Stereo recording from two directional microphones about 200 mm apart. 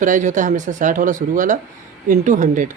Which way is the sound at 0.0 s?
40° right (ahead or behind).